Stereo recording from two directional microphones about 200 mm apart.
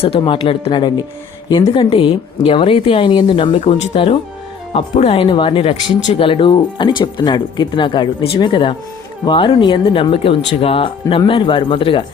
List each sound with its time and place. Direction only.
0.0 s speech: 25° left (ahead or behind)